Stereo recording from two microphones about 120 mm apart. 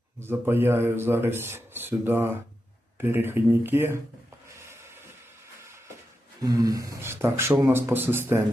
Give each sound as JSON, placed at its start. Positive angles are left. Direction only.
{"t": 0.2, "sound": "speech", "side_deg": -20}
{"t": 4.4, "sound": "a sound", "side_deg": -20}
{"t": 6.4, "sound": "speech", "side_deg": -30}